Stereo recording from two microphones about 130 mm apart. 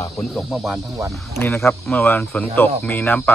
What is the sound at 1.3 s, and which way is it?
Speech, 20° left (ahead or behind).